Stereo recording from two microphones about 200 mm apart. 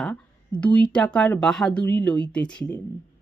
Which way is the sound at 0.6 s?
5° left (ahead or behind).